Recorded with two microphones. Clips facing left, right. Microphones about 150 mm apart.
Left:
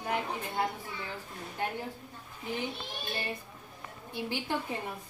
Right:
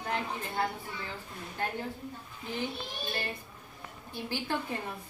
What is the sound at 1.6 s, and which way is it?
Speech, 15° left (ahead or behind).